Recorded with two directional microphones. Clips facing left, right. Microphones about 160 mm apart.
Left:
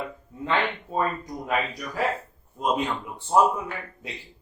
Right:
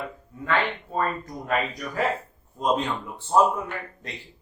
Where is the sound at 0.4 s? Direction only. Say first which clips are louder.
Even; 20° left (ahead or behind).